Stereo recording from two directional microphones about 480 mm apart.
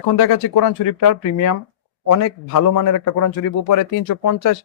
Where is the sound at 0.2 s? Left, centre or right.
Left.